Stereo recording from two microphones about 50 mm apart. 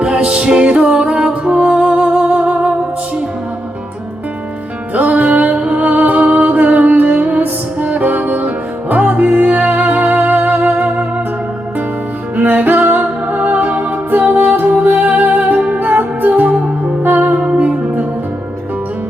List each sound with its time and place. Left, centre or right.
0.0 s music: right
4.9 s music: right
12.4 s music: right